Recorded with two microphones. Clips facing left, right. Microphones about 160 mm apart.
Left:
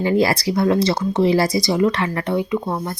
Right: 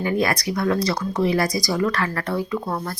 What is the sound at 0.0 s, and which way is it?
Speech, 30° left (ahead or behind).